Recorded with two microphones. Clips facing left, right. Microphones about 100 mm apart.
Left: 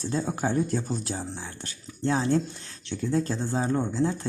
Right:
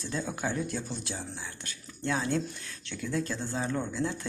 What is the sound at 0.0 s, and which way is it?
Speech, 35° left (ahead or behind).